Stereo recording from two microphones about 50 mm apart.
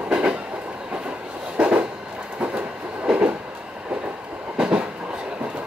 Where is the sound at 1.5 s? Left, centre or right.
Right.